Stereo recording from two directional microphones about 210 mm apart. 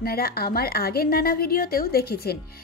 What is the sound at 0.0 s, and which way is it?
Speech, 45° left (ahead or behind).